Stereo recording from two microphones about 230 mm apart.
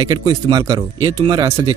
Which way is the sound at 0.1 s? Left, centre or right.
Centre.